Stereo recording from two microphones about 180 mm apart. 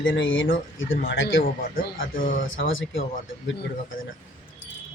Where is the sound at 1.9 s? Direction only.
50° left (ahead or behind).